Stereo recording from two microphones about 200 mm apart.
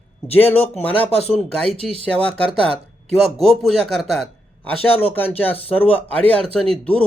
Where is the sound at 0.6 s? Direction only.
10° left (ahead or behind).